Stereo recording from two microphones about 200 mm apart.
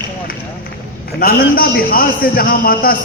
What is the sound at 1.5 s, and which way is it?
A man's voice, 50° left (ahead or behind).